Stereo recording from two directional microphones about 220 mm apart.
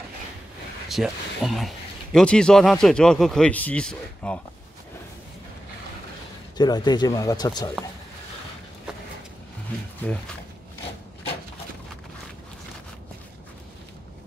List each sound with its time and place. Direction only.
0.8 s speech: centre (ahead or behind)
6.5 s speech: 20° left (ahead or behind)